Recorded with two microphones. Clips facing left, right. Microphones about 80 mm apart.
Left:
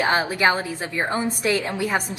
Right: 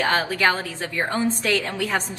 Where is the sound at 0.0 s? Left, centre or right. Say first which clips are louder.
Left 1 dB; centre.